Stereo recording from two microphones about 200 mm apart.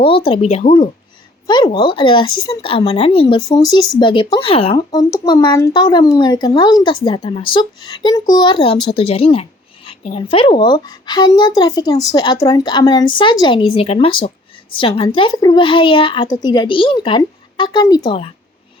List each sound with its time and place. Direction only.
0.0 s speech: 25° left (ahead or behind)